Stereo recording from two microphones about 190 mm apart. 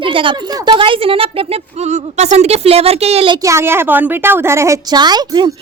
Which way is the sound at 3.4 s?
15° right (ahead or behind).